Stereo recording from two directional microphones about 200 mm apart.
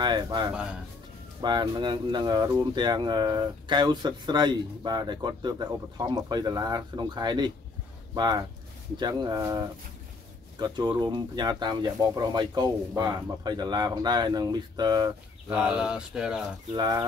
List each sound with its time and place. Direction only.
0.0 s speech: 20° right (ahead or behind)
15.5 s speech: 5° right (ahead or behind)
16.7 s speech: 20° right (ahead or behind)